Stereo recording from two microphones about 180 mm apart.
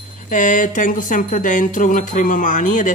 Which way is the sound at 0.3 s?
45° left (ahead or behind).